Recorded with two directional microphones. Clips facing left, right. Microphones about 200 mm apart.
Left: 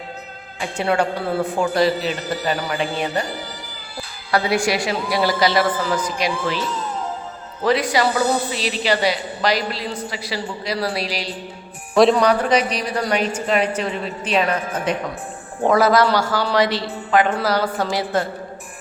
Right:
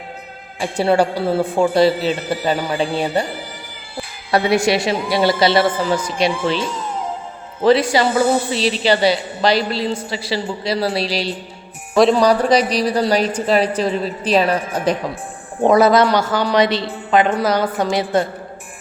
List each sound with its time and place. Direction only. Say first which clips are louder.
0.6 s speech: right 4 dB; 35° right (ahead or behind)
4.3 s a woman's voice: right 4 dB; 25° right (ahead or behind)
15.6 s a woman's voice: right 3 dB; 20° right (ahead or behind)